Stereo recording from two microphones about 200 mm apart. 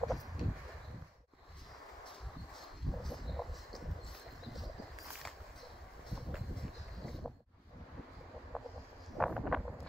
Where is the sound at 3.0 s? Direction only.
Centre (ahead or behind).